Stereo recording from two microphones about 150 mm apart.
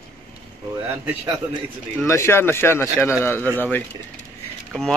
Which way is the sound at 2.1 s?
20° left (ahead or behind).